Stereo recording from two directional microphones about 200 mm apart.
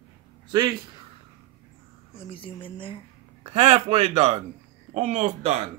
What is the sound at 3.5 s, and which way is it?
Speech, 35° right (ahead or behind).